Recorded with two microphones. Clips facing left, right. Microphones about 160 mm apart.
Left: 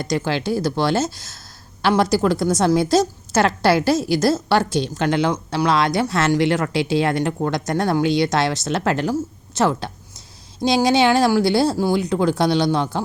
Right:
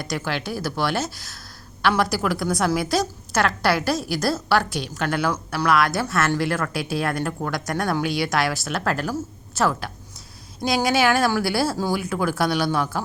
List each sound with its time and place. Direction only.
0.0 s a woman's voice: 25° left (ahead or behind)